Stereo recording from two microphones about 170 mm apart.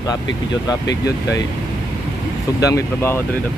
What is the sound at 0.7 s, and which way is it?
Speech, 20° left (ahead or behind).